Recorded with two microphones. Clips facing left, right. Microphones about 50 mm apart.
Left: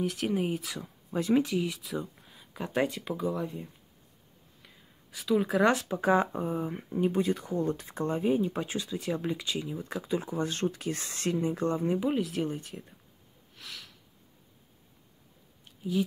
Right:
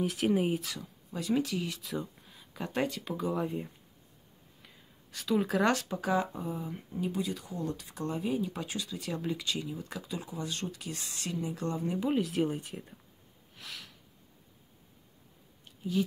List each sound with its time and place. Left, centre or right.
0.0 s speech: centre
0.8 s speech: left
1.5 s speech: centre
4.6 s a sound: centre
5.6 s speech: centre
5.9 s speech: left
12.0 s speech: centre
13.6 s sniff: centre